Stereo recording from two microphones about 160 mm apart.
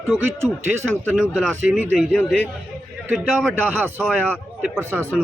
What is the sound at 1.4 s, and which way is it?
Speech, 5° right (ahead or behind).